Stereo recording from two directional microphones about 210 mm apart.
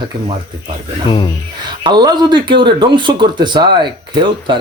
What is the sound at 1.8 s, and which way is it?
Speech, 20° right (ahead or behind).